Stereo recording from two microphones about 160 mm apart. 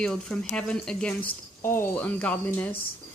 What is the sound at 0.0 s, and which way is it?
A woman's voice, 5° left (ahead or behind).